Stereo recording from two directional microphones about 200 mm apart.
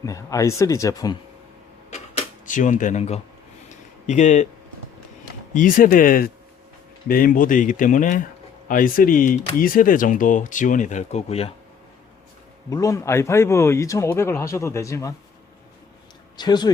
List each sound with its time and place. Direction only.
0.0 s speech: 15° left (ahead or behind)
1.9 s cash register: 35° left (ahead or behind)
4.0 s speech: 35° left (ahead or behind)
5.5 s speech: 45° left (ahead or behind)
12.7 s speech: 15° left (ahead or behind)
16.4 s speech: 20° left (ahead or behind)